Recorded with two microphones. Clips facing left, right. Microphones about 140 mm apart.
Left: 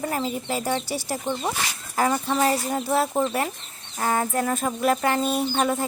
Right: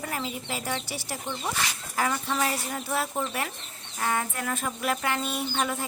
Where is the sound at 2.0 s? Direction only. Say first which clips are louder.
Left 5 dB; 35° left (ahead or behind).